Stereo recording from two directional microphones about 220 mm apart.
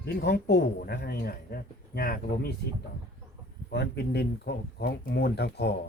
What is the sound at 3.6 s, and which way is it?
Speech, 50° left (ahead or behind).